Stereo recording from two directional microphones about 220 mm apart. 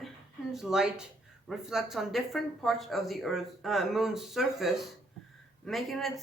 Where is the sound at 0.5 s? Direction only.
Centre (ahead or behind).